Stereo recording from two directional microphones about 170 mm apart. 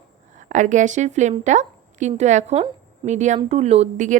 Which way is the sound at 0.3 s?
45° right (ahead or behind).